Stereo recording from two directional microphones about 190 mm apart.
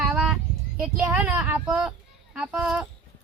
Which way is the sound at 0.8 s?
10° right (ahead or behind).